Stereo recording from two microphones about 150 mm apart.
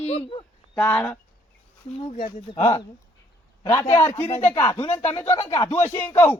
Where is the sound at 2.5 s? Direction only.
40° left (ahead or behind).